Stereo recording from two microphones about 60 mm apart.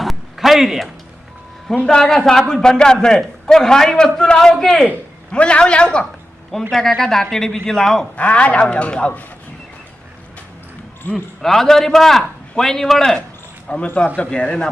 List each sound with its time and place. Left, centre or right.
0.0 s a sound: centre
1.7 s a man's voice: centre
5.3 s a man's voice: centre
6.5 s a man's voice: centre
8.1 s a man's voice: left
11.1 s a man's voice: centre
13.7 s a man's voice: centre